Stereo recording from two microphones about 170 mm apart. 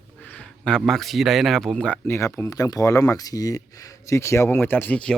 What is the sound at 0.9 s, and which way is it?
Speech, centre (ahead or behind).